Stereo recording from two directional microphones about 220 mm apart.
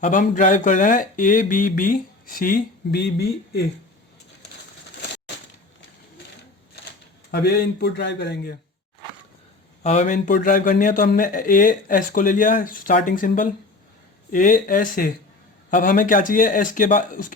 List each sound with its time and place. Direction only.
0.0 s a man's voice: 35° left (ahead or behind)
7.3 s a man's voice: 50° left (ahead or behind)
9.8 s a man's voice: 30° left (ahead or behind)